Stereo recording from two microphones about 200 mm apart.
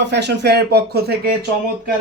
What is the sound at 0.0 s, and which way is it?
Speech, 60° right (ahead or behind).